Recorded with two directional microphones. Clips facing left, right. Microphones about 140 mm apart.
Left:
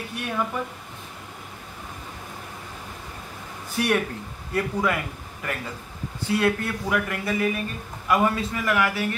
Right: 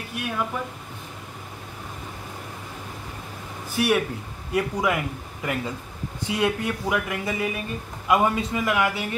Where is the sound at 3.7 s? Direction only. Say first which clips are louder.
Right 1 dB; 5° right (ahead or behind).